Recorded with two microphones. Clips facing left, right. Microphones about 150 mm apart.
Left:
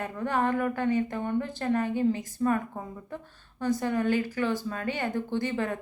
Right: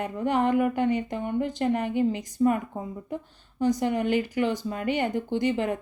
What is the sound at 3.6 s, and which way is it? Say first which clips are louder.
Speech: right 3 dB; 15° right (ahead or behind).